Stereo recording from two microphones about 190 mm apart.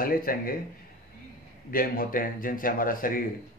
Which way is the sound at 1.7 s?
50° left (ahead or behind).